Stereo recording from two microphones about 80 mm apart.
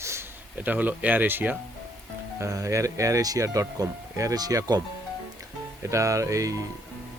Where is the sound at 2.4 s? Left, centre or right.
Right.